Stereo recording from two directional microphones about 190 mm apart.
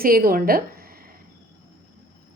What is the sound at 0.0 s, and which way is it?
A woman's voice, 50° right (ahead or behind).